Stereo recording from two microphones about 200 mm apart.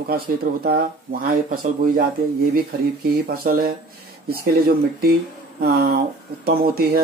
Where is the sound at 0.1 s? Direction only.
50° right (ahead or behind).